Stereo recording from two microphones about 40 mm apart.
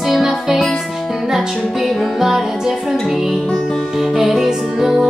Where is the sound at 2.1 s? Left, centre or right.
Centre.